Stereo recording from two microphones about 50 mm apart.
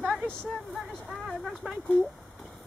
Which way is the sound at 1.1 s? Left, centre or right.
Centre.